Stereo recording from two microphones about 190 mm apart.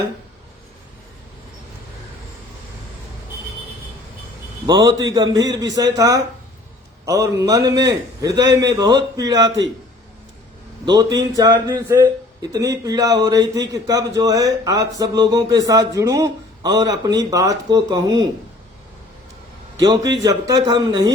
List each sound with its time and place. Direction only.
4.6 s a man's voice: 20° right (ahead or behind)
10.8 s a man's voice: 20° right (ahead or behind)
19.8 s a man's voice: 20° right (ahead or behind)